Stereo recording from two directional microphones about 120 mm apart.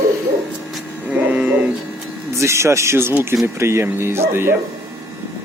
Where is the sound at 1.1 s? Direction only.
10° right (ahead or behind).